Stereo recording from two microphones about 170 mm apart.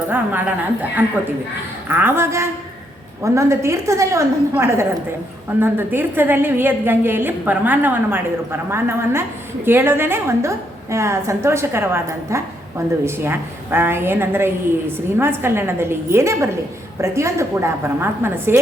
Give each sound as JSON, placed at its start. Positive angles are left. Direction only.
{"t": 0.1, "sound": "a woman's voice", "side_deg": -10}